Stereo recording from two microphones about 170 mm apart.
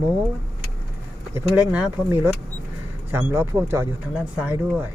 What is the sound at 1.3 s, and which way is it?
Speech, 5° right (ahead or behind).